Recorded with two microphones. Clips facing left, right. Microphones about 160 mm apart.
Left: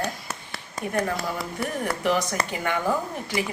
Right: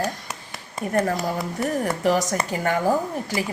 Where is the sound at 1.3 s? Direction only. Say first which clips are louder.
Right 4 dB; 20° right (ahead or behind).